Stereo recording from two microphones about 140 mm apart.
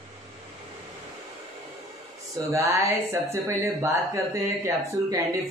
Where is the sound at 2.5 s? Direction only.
20° right (ahead or behind).